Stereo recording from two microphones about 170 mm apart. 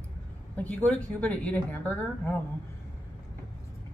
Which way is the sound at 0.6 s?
10° left (ahead or behind).